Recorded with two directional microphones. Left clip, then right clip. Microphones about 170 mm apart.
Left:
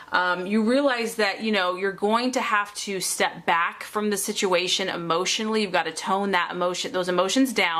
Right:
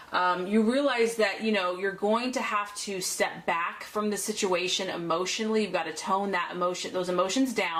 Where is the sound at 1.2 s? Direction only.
30° left (ahead or behind).